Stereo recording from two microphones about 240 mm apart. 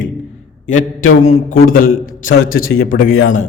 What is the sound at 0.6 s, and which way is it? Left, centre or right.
A man's voice, left.